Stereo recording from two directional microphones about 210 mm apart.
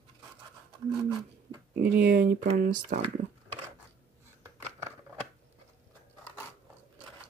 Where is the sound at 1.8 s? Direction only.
45° right (ahead or behind).